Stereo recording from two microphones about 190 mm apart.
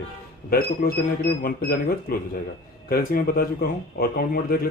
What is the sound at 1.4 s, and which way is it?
Speech, 50° left (ahead or behind).